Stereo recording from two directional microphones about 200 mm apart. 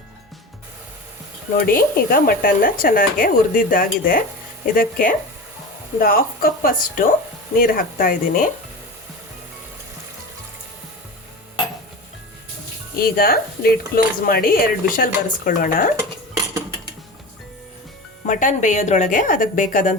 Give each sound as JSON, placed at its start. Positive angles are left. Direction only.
{"t": 1.5, "sound": "speech", "side_deg": 45}
{"t": 13.0, "sound": "speech", "side_deg": 50}
{"t": 18.3, "sound": "a woman's voice", "side_deg": 40}